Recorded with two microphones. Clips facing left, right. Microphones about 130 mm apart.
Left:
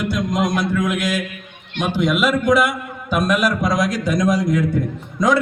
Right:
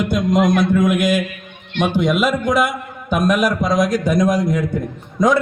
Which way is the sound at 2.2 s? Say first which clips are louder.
Left 1 dB; 25° right (ahead or behind).